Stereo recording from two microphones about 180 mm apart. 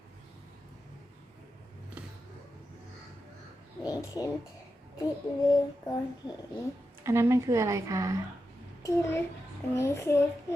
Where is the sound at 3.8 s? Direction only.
20° left (ahead or behind).